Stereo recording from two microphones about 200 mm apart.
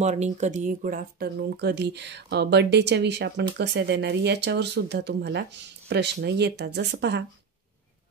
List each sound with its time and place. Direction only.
0.0 s speech: 35° right (ahead or behind); by 7.2 s 60° right (ahead or behind)